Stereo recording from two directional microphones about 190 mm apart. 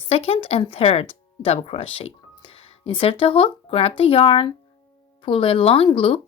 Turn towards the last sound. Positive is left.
turn(degrees=30)  # may be behind; listen again after turning